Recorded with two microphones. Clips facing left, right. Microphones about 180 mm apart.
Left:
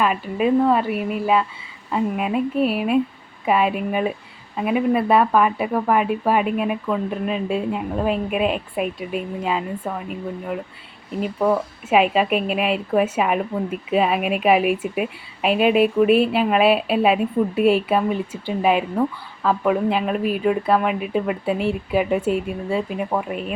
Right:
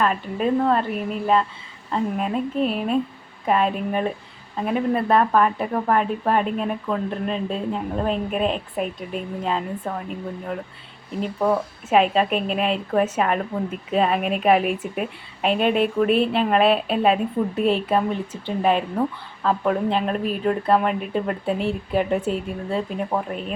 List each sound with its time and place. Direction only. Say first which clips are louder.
0.0 s speech: left 2 dB; 10° left (ahead or behind)
11.2 s speech: left 2 dB; 5° left (ahead or behind)